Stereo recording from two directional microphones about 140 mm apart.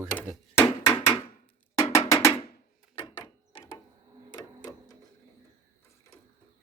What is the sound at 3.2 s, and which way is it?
Mechanisms, 30° left (ahead or behind).